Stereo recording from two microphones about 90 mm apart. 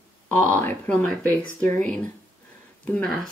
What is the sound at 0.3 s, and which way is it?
Speech, 20° left (ahead or behind).